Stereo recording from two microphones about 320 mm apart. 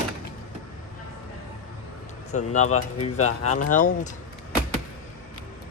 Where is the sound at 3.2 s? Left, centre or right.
Left.